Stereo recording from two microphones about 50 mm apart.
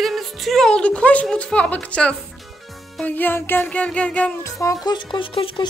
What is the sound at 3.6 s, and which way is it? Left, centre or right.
Music, left.